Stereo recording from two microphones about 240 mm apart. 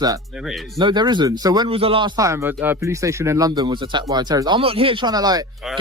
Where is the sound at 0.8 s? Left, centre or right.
Centre.